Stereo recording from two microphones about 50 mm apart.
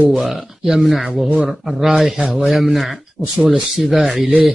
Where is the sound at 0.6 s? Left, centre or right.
Centre.